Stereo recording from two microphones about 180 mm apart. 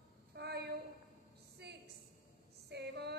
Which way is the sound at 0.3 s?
65° right (ahead or behind).